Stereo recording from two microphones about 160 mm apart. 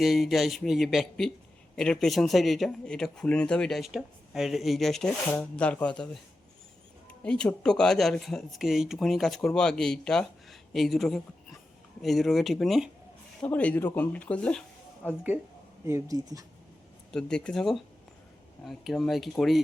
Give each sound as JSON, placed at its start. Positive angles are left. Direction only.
{"t": 0.0, "sound": "speech", "side_deg": 0}
{"t": 7.3, "sound": "speech", "side_deg": 5}
{"t": 15.9, "sound": "speech", "side_deg": -20}
{"t": 17.1, "sound": "speech", "side_deg": 5}